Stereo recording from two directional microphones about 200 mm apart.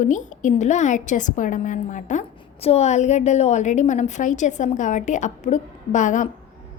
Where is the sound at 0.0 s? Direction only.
40° left (ahead or behind).